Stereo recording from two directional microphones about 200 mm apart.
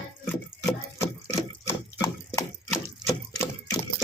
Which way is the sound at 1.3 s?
15° left (ahead or behind).